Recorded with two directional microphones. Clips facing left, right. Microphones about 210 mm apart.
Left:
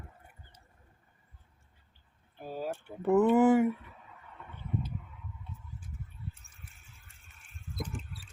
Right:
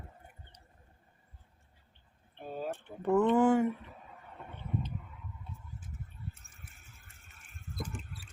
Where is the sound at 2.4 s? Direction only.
5° left (ahead or behind).